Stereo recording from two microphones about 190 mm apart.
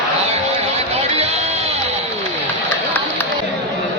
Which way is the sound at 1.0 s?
35° right (ahead or behind).